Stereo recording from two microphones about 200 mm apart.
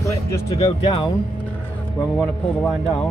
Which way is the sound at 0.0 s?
15° left (ahead or behind).